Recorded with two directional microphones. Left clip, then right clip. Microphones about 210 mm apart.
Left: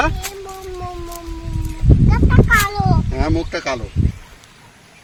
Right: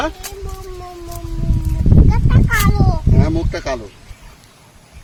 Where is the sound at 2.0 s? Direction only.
25° right (ahead or behind).